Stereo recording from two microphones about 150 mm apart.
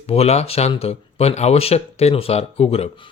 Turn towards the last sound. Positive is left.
turn(degrees=40)  # may be behind; listen again after turning